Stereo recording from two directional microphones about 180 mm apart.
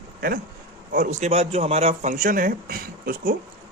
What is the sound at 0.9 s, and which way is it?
Speech, 45° right (ahead or behind).